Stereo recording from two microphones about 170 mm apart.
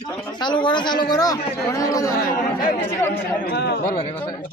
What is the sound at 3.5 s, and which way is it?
Speech, 75° left (ahead or behind).